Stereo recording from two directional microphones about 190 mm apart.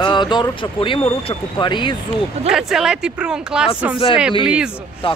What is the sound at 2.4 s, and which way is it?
Speech, centre (ahead or behind).